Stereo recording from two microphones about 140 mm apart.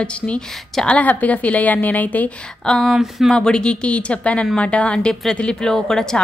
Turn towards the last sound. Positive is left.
turn(degrees=5)  # may be behind; listen again after turning